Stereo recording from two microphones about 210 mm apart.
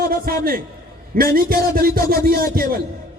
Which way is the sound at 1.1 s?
45° right (ahead or behind).